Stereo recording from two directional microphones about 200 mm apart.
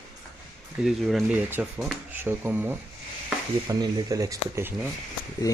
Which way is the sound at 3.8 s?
20° right (ahead or behind).